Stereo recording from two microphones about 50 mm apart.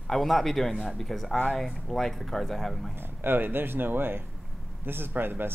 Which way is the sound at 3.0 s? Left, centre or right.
Right.